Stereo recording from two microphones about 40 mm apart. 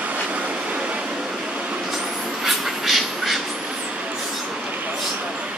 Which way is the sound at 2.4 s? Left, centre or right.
Centre.